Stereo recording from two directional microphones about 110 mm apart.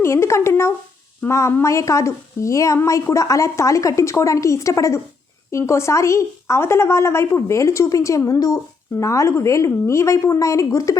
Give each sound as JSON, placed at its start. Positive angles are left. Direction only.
{"t": 0.0, "sound": "a woman's voice", "side_deg": 25}